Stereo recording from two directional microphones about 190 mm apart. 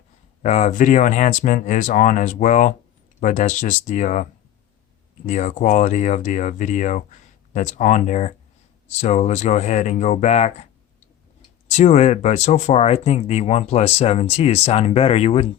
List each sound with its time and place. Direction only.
0.4 s speech: 40° left (ahead or behind)
11.7 s speech: 35° left (ahead or behind)